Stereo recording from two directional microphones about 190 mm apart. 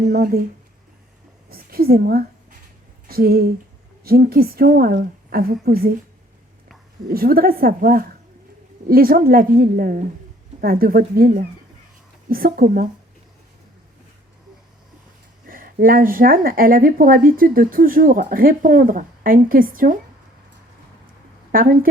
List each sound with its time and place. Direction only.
0.1 s speech: 55° right (ahead or behind)
1.5 s a woman's voice: 50° right (ahead or behind)
7.1 s speech: 50° right (ahead or behind)
15.4 s speech: 50° right (ahead or behind)
21.5 s speech: 50° right (ahead or behind)